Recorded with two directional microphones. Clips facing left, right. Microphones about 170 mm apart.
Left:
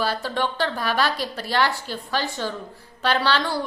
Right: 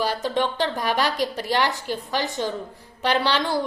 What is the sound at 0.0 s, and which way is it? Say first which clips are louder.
A woman's voice: right 1 dB; 20° right (ahead or behind).